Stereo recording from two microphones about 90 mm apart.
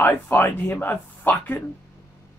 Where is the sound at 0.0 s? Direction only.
25° left (ahead or behind).